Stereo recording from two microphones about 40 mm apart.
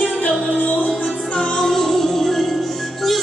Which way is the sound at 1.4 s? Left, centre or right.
Centre.